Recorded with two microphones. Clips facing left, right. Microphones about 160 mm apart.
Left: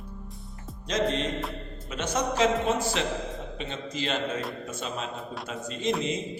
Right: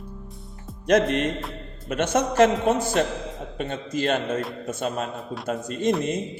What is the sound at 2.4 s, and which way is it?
Speech, 50° right (ahead or behind).